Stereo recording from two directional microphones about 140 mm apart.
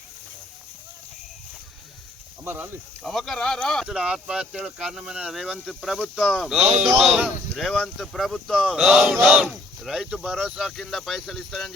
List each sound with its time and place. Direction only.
2.4 s speech: 15° right (ahead or behind)
3.0 s speech: centre (ahead or behind)